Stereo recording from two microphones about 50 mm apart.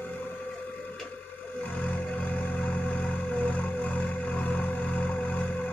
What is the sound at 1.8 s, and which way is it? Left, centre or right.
Music, left.